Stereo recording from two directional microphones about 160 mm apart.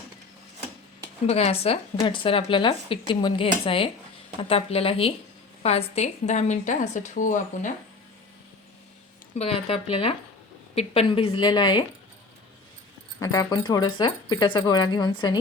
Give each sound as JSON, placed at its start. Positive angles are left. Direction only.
{"t": 1.3, "sound": "a woman's voice", "side_deg": 40}
{"t": 9.3, "sound": "speech", "side_deg": 40}
{"t": 13.1, "sound": "speech", "side_deg": 20}